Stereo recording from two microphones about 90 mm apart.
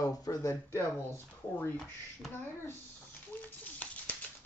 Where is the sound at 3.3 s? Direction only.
15° left (ahead or behind).